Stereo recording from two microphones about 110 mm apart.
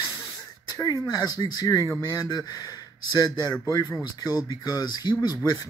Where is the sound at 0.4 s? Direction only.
35° left (ahead or behind).